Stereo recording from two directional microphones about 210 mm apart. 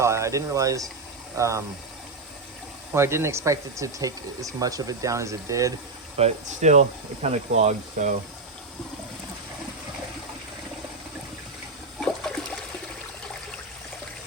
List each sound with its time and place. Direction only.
0.0 s speech: 15° right (ahead or behind)
2.9 s speech: 10° right (ahead or behind)
6.1 s speech: 30° right (ahead or behind)
11.9 s trickle: centre (ahead or behind)